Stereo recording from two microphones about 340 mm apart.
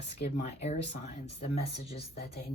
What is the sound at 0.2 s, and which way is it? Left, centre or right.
Speech, centre.